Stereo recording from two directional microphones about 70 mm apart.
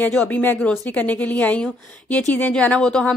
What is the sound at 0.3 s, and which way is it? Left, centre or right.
Speech, left.